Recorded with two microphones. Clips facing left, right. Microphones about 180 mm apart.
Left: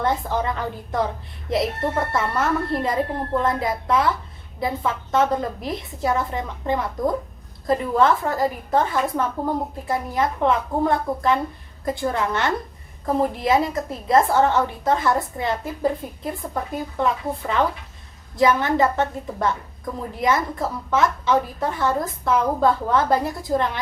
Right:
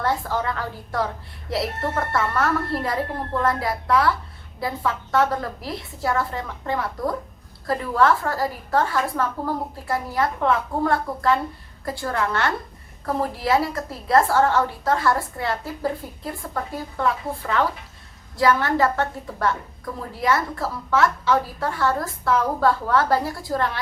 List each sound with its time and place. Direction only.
0.0 s a woman's voice: 20° left (ahead or behind)